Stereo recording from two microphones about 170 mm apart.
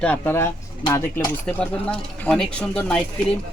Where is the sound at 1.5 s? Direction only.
5° left (ahead or behind).